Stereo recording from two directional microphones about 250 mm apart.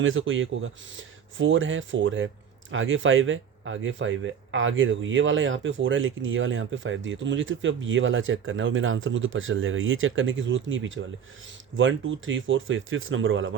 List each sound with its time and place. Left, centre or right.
0.0 s speech: right